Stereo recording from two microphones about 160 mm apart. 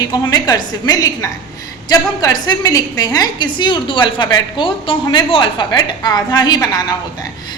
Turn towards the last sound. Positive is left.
turn(degrees=25)  # may be behind; listen again after turning